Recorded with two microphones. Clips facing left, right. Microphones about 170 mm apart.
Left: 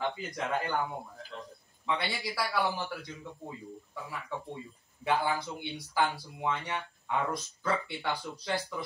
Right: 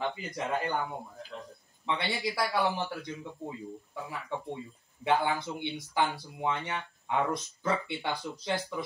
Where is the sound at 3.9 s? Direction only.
20° right (ahead or behind).